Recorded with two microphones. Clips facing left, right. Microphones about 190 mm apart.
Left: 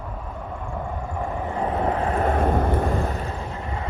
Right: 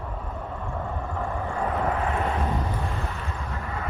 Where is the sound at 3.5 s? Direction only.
25° left (ahead or behind).